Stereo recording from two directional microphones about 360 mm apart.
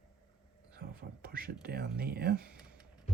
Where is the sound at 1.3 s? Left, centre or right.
Right.